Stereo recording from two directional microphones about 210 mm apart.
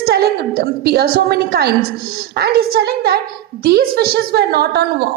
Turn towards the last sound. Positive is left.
turn(degrees=-50)  # may be behind; listen again after turning